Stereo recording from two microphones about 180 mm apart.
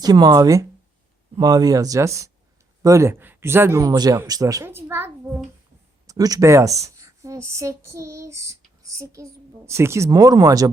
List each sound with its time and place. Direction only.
0.0 s a woman's voice: 20° right (ahead or behind)